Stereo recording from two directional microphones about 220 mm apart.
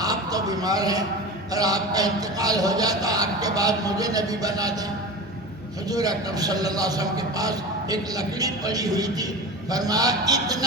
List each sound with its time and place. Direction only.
0.0 s a sound: 15° right (ahead or behind)
1.5 s a man's voice: 15° right (ahead or behind)
5.9 s a man's voice: 15° right (ahead or behind)